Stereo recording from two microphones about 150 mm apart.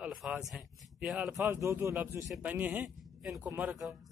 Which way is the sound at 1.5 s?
15° right (ahead or behind).